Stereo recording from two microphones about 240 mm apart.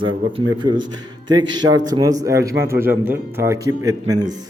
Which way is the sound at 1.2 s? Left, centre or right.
Centre.